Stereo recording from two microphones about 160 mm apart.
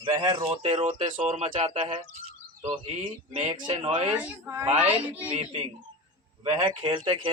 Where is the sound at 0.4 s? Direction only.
40° right (ahead or behind).